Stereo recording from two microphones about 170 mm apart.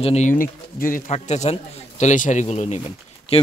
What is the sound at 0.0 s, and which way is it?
Speech, 40° left (ahead or behind).